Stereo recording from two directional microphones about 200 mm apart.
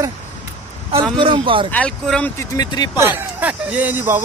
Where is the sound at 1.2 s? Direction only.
25° right (ahead or behind).